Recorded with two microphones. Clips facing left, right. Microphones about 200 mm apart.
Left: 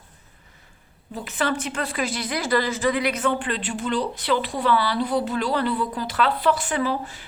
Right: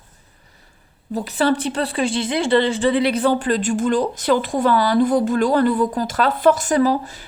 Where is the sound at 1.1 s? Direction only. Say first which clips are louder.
Right 7 dB; 35° right (ahead or behind).